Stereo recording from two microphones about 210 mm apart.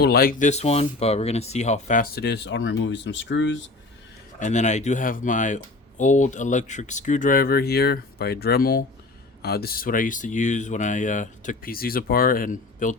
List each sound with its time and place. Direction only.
0.0 s speech: 45° left (ahead or behind)
4.4 s speech: 35° left (ahead or behind)